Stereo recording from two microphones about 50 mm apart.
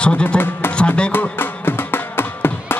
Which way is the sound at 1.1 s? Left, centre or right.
Left.